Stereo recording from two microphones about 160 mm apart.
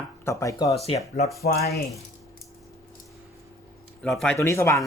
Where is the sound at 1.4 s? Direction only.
80° left.